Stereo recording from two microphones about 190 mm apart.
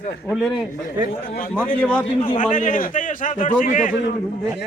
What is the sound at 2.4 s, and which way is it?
A man's voice, 45° left (ahead or behind).